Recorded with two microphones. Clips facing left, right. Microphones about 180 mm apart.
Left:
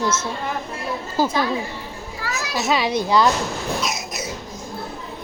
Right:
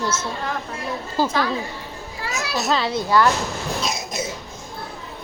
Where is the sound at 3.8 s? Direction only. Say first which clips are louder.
Right 1 dB; 30° right (ahead or behind).